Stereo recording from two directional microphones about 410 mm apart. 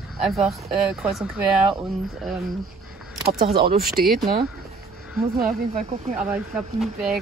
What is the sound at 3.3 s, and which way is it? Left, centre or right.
Speech, right.